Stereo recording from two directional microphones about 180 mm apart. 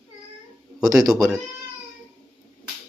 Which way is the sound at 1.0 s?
20° right (ahead or behind).